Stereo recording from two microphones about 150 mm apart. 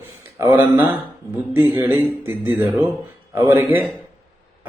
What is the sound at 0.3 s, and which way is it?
Speech, 15° right (ahead or behind).